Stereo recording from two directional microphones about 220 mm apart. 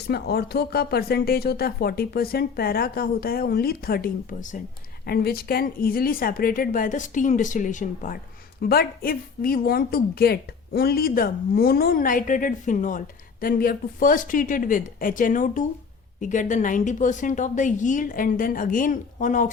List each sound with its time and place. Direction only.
0.1 s a woman's voice: 45° left (ahead or behind)